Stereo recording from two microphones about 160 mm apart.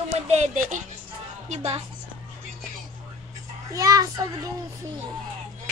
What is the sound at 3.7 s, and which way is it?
Speech, 20° right (ahead or behind).